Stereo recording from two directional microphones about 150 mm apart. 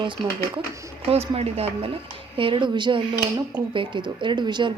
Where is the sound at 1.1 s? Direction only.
40° right (ahead or behind).